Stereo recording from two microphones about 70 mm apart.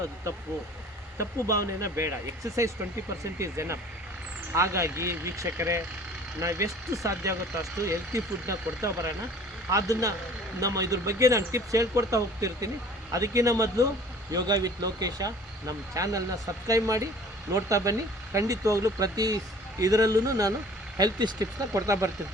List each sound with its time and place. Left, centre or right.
1.5 s speech: right
14.3 s speech: right
21.0 s speech: right
21.7 s speech: right